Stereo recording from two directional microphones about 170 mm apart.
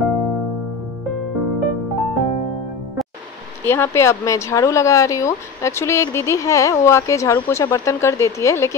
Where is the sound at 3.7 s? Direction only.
15° left (ahead or behind).